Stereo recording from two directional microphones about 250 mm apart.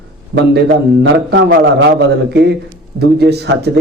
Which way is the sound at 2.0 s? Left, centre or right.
Right.